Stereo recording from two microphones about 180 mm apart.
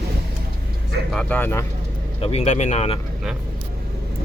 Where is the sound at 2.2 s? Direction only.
35° left (ahead or behind).